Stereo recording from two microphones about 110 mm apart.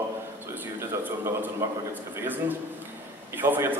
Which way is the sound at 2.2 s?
15° right (ahead or behind).